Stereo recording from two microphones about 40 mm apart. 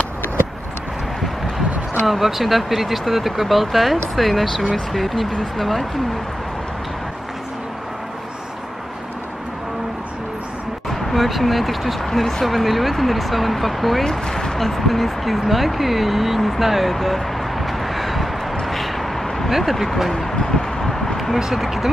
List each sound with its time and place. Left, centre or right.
2.0 s speech: centre
10.9 s speech: centre
12.4 s speech: centre
14.0 s speech: centre
18.7 s a sound: centre
19.5 s speech: centre
20.3 s a sound: centre
21.4 s speech: centre